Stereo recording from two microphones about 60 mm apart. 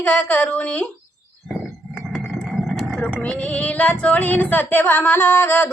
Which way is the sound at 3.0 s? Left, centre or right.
Left.